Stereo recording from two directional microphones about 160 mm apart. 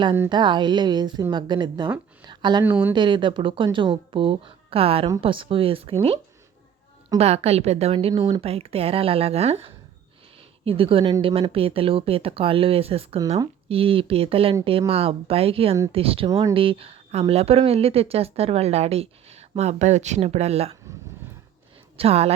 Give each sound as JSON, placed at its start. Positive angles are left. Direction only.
{"t": 0.3, "sound": "a woman's voice", "side_deg": -30}
{"t": 2.6, "sound": "speech", "side_deg": -10}
{"t": 2.9, "sound": "speech", "side_deg": -30}
{"t": 7.2, "sound": "speech", "side_deg": -40}
{"t": 8.1, "sound": "a woman's voice", "side_deg": -25}
{"t": 8.4, "sound": "speech", "side_deg": -40}
{"t": 16.3, "sound": "a woman's voice", "side_deg": -20}
{"t": 16.6, "sound": "speech", "side_deg": -35}
{"t": 21.9, "sound": "speech", "side_deg": -40}